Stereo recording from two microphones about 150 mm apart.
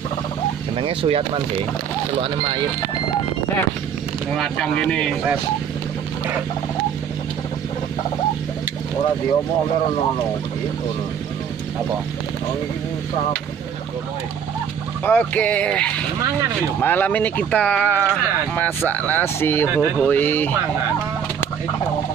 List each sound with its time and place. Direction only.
0.7 s speech: 40° right (ahead or behind)
4.4 s speech: 5° left (ahead or behind)
15.0 s speech: 10° left (ahead or behind)
19.7 s speech: 15° right (ahead or behind)
20.1 s speech: 10° left (ahead or behind)